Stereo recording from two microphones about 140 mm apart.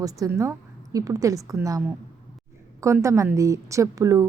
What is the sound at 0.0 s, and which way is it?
A woman's voice, 25° right (ahead or behind).